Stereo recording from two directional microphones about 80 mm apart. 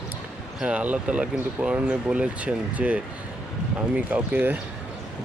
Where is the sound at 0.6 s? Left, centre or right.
Centre.